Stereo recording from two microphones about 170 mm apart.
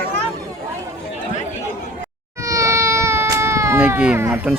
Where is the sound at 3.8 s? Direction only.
5° right (ahead or behind).